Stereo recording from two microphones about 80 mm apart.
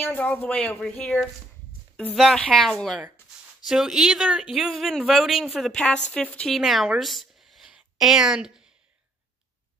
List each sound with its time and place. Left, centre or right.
0.0 s speech: left
2.3 s speech: centre
6.5 s speech: centre
7.0 s a sound: centre